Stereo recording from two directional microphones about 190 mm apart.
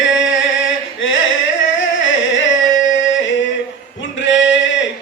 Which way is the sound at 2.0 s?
80° left.